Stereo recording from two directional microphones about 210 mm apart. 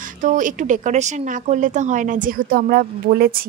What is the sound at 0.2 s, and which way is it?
Speech, 40° right (ahead or behind).